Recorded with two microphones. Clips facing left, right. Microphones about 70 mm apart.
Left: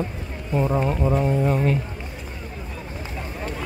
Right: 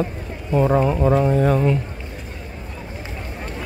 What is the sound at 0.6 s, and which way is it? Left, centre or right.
Speech, right.